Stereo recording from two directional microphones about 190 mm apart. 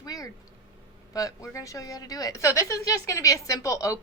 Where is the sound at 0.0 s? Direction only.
20° left (ahead or behind).